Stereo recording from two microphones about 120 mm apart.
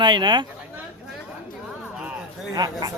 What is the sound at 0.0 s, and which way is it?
Speech, 40° right (ahead or behind).